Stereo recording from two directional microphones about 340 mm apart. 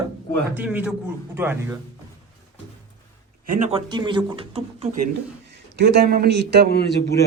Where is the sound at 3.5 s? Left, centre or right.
Centre.